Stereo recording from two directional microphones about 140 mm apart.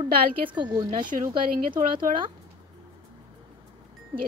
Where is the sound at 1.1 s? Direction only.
60° right (ahead or behind).